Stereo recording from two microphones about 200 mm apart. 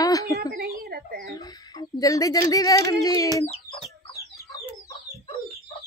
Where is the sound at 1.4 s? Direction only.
20° left (ahead or behind).